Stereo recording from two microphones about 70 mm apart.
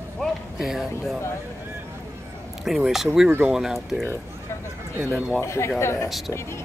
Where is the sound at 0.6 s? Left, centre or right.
Centre.